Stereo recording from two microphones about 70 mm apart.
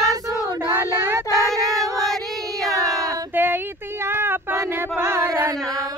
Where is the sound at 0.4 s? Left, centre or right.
Right.